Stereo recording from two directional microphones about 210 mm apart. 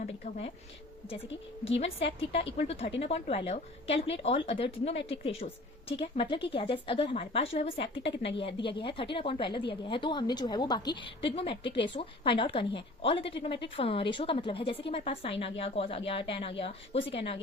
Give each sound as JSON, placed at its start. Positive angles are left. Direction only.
{"t": 0.0, "sound": "a woman's voice", "side_deg": 30}
{"t": 1.6, "sound": "a woman's voice", "side_deg": 30}